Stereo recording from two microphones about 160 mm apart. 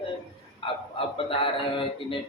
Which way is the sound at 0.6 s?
35° left (ahead or behind).